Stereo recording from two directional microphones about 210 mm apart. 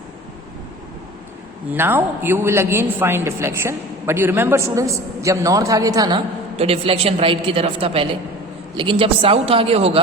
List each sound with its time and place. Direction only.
1.7 s a man's voice: 10° right (ahead or behind); by 10.0 s 30° right (ahead or behind)